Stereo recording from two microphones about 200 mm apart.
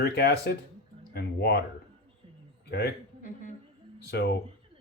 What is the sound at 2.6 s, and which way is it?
Speech, 55° left (ahead or behind).